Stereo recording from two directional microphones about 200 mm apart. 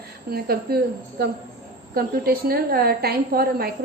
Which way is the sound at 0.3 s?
50° right (ahead or behind).